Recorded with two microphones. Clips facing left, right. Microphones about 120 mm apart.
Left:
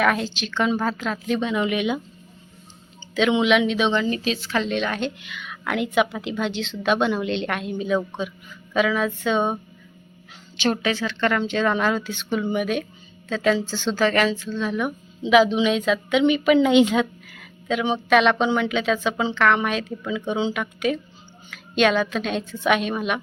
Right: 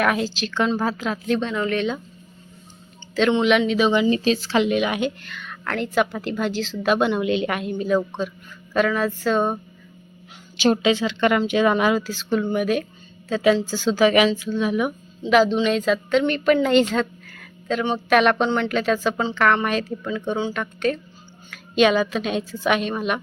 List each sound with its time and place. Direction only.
0.0 s a woman's voice: centre (ahead or behind)
1.4 s speech: 10° left (ahead or behind)
3.4 s a woman's voice: centre (ahead or behind)
4.2 s speech: 40° right (ahead or behind)
4.7 s a woman's voice: 10° right (ahead or behind)
5.2 s a woman's voice: 5° left (ahead or behind)
10.7 s a woman's voice: 20° right (ahead or behind); by 23.2 s centre (ahead or behind)